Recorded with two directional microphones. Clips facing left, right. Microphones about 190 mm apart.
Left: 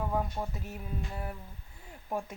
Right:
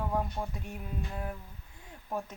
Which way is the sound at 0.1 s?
Centre (ahead or behind).